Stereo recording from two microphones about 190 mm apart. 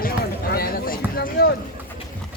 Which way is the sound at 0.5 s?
50° left (ahead or behind).